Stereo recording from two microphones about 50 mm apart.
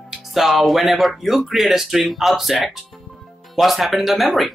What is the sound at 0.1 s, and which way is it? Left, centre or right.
Speech, centre.